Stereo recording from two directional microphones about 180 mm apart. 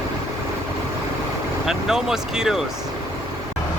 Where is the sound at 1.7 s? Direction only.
5° right (ahead or behind).